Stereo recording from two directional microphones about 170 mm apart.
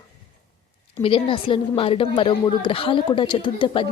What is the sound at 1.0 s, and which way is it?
A woman's voice, 30° left (ahead or behind).